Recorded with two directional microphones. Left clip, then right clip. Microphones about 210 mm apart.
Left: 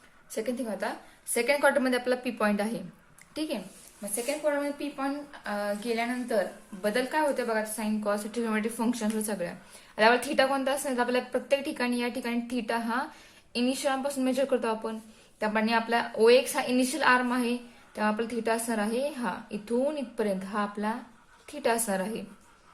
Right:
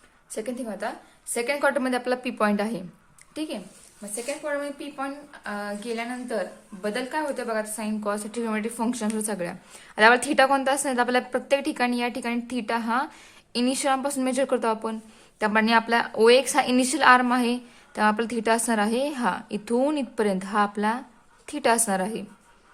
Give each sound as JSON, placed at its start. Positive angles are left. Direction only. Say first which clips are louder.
{"t": 0.3, "sound": "a woman's voice", "louder": "even", "side_deg": -25}